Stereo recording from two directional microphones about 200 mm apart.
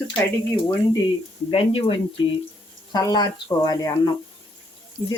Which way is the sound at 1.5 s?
30° left (ahead or behind).